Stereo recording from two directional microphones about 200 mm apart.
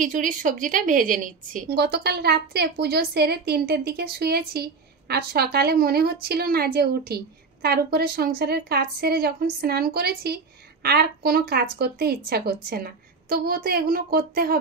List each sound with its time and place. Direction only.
0.0 s a woman's voice: 40° right (ahead or behind)